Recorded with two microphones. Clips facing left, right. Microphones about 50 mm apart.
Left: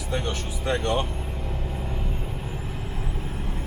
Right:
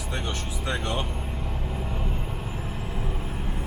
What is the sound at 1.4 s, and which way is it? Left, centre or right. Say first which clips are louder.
Vehicle: left 1 dB; centre.